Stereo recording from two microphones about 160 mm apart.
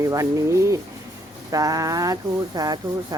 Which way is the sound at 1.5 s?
20° right (ahead or behind).